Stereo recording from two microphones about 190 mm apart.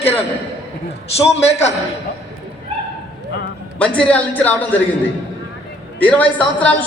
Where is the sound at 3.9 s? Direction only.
5° left (ahead or behind).